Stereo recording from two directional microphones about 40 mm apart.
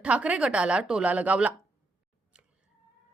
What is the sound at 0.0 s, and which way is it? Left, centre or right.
A woman's voice, right.